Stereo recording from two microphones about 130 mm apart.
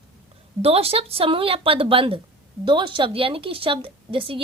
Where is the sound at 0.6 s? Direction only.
50° right (ahead or behind).